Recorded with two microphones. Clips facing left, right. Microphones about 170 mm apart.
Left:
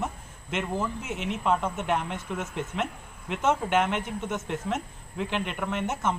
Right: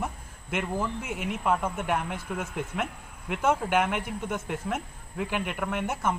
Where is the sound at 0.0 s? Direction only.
10° right (ahead or behind).